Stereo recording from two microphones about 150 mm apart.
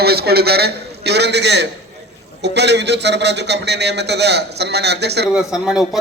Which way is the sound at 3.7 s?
90° right.